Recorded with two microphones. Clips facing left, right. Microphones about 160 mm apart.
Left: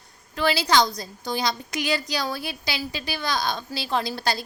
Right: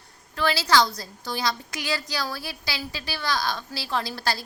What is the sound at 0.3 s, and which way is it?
A woman's voice, 15° left (ahead or behind).